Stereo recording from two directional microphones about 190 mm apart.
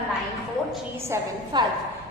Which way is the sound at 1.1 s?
25° right (ahead or behind).